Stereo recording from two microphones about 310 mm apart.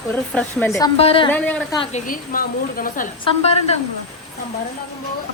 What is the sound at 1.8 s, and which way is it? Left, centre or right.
A woman's voice, left.